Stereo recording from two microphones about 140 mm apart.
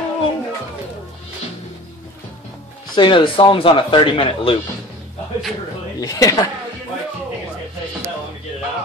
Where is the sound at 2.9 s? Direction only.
35° left (ahead or behind).